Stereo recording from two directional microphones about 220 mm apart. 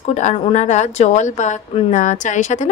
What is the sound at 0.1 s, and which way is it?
A woman's voice, 30° left (ahead or behind).